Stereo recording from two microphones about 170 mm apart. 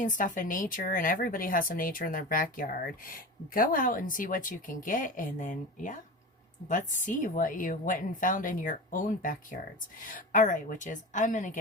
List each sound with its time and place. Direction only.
0.0 s a woman's voice: 50° left (ahead or behind)